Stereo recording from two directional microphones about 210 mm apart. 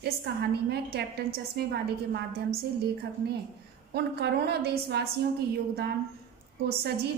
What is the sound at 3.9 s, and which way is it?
A woman's voice, 50° right (ahead or behind).